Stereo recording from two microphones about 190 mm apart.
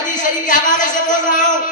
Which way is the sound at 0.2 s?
45° left (ahead or behind).